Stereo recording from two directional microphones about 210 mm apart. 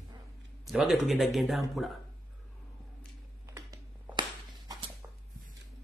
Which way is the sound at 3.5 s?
15° right (ahead or behind).